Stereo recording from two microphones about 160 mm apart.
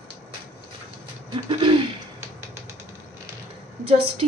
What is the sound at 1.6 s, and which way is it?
Speech, 30° right (ahead or behind).